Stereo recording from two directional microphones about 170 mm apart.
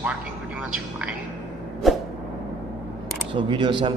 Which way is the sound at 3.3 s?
30° right (ahead or behind).